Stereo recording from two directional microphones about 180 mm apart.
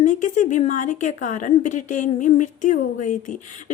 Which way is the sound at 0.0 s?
45° left (ahead or behind).